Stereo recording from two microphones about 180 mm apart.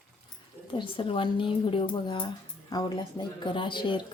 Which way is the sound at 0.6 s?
30° left (ahead or behind).